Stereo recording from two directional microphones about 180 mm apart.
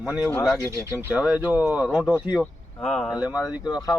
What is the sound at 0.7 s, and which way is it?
Speech, 15° right (ahead or behind).